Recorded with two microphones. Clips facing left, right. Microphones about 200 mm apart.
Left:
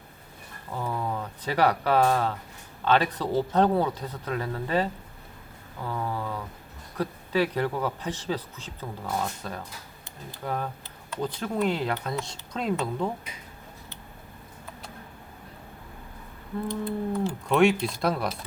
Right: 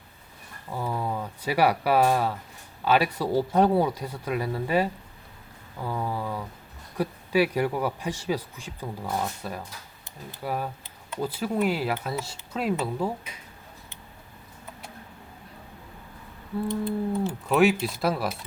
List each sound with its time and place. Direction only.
0.7 s speech: 10° right (ahead or behind)
17.1 s speech: 5° right (ahead or behind)